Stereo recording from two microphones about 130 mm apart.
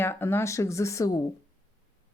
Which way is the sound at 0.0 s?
15° left (ahead or behind).